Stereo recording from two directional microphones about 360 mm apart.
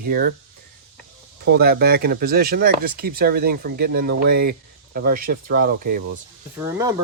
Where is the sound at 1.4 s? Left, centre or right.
Right.